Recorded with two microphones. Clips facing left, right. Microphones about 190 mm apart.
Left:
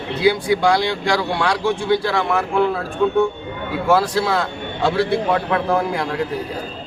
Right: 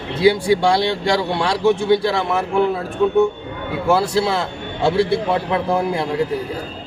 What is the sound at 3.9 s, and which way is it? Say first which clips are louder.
Speech: even; 25° right (ahead or behind).